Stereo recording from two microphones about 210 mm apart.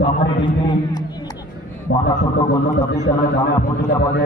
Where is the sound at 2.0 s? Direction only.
55° left (ahead or behind).